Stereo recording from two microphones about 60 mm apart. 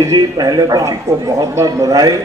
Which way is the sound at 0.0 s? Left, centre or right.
Right.